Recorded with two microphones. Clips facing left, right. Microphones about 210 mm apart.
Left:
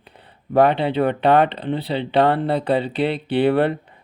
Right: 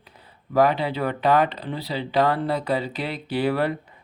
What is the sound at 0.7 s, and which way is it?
Speech, 30° left (ahead or behind).